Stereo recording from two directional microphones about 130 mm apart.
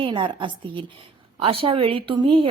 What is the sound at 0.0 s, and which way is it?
A woman's voice, 40° right (ahead or behind).